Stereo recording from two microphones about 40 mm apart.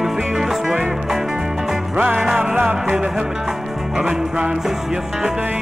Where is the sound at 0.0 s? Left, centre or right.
Centre.